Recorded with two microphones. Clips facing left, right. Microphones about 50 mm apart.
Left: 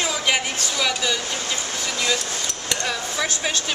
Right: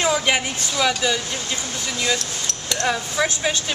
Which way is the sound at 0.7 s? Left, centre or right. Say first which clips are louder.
Right 4 dB; centre.